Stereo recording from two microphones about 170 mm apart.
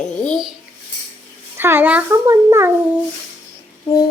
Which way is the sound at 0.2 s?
5° left (ahead or behind).